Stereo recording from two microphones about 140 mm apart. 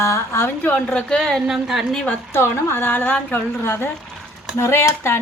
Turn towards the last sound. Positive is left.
turn(degrees=20)  # may be behind; listen again after turning